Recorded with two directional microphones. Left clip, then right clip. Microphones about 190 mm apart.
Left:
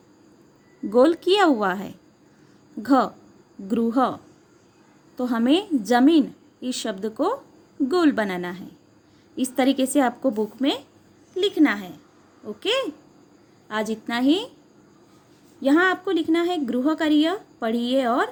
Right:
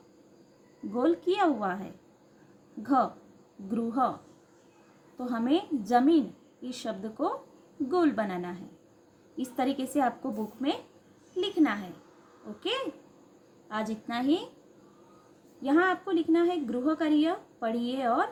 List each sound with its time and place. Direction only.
0.9 s a woman's voice: 50° left (ahead or behind)
5.1 s a woman's voice: 45° left (ahead or behind)
15.6 s a woman's voice: 45° left (ahead or behind)